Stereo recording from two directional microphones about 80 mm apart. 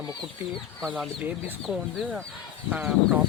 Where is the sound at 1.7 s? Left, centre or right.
Centre.